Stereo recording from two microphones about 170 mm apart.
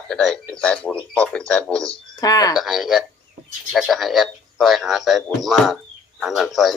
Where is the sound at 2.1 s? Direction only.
20° left (ahead or behind).